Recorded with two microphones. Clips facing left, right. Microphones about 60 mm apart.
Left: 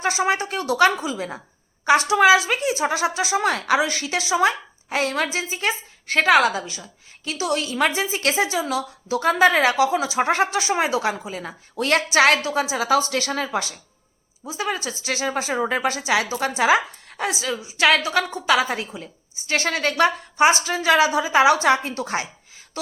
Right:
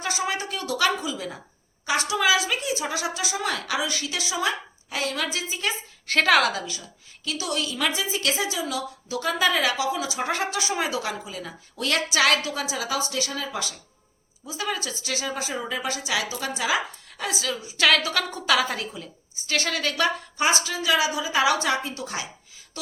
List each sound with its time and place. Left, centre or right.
0.0 s a woman's voice: left
6.1 s a woman's voice: centre; by 12.9 s left
12.9 s a woman's voice: left
17.7 s a woman's voice: left
20.7 s a woman's voice: left